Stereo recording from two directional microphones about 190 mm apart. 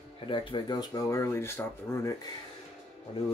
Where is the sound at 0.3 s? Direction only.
25° left (ahead or behind).